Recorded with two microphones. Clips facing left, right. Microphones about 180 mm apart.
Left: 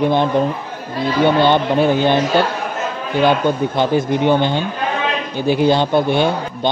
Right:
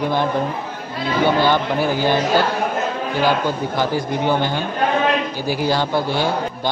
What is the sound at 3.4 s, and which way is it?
Speech, 20° left (ahead or behind).